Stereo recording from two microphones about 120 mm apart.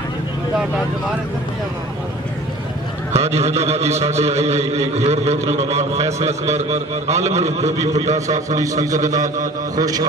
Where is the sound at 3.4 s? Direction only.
65° right (ahead or behind).